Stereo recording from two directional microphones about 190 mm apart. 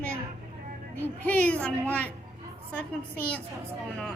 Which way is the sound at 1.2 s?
5° left (ahead or behind).